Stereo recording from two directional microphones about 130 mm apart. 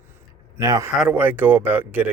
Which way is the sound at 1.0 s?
10° right (ahead or behind).